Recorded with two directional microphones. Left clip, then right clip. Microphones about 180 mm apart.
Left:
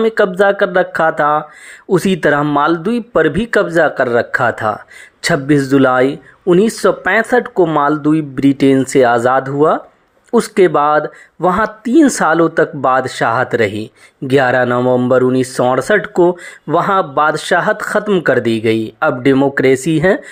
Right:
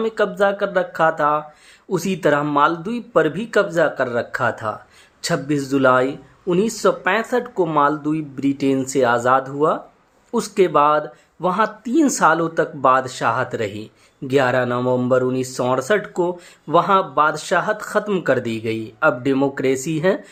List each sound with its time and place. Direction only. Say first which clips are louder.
0.0 s speech: left 7 dB; 35° left (ahead or behind)